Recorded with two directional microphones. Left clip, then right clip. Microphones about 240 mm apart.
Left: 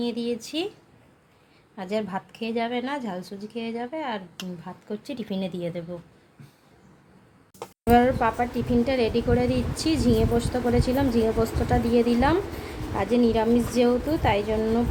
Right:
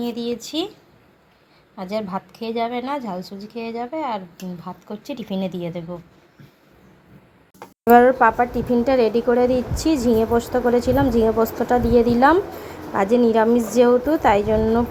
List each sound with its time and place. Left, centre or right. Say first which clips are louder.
0.0 s a woman's voice: right 3 dB; centre
1.7 s a woman's voice: right 3 dB; centre
7.9 s speech: right 8 dB; centre